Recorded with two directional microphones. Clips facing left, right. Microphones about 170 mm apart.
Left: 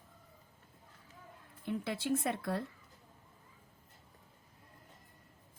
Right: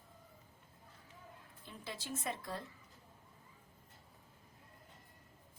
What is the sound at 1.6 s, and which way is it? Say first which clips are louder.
Speech: left 12 dB; 60° left (ahead or behind).